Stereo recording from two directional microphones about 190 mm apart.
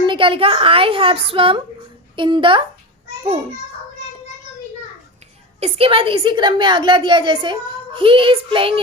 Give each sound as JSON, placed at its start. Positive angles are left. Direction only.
{"t": 0.0, "sound": "a woman's voice", "side_deg": -25}
{"t": 5.5, "sound": "a woman's voice", "side_deg": -30}